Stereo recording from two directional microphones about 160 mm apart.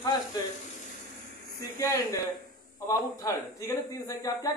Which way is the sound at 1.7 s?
20° left (ahead or behind).